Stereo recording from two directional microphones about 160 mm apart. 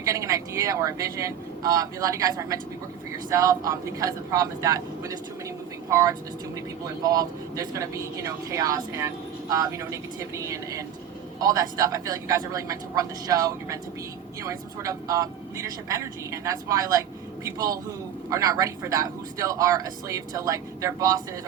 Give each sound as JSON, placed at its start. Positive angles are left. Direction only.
{"t": 0.0, "sound": "speech", "side_deg": -20}